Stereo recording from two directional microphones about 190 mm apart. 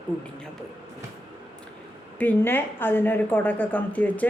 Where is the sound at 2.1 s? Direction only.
10° left (ahead or behind).